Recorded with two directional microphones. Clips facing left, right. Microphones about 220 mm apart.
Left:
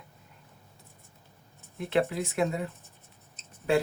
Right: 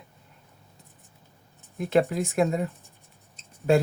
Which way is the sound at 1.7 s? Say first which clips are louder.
Right 4 dB; 45° right (ahead or behind).